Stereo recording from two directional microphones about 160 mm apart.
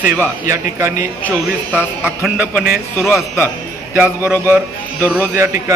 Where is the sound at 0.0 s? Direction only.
15° right (ahead or behind).